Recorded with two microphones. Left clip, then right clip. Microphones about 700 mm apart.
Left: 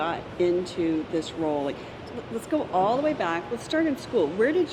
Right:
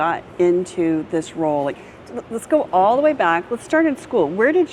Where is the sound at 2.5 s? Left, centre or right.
Right.